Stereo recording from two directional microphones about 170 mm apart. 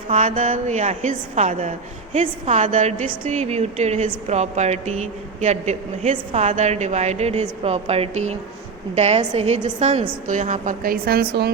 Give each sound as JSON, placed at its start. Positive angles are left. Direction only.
{"t": 0.1, "sound": "a woman's voice", "side_deg": -45}